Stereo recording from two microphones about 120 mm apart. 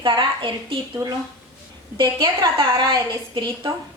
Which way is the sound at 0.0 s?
40° right (ahead or behind).